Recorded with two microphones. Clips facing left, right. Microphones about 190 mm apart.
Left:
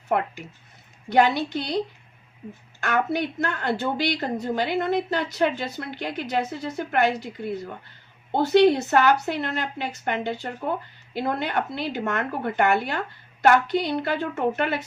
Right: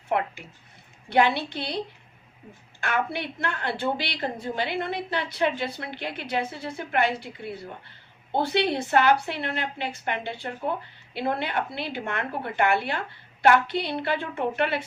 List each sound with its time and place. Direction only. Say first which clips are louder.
1.2 s a woman's voice: left 3 dB; 45° left (ahead or behind)
2.8 s a woman's voice: left 4 dB; 45° left (ahead or behind)
8.4 s a woman's voice: left 7 dB; 45° left (ahead or behind)